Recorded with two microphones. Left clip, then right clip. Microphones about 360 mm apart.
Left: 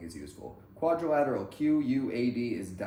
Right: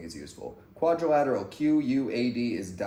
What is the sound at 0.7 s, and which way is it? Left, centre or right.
Speech, centre.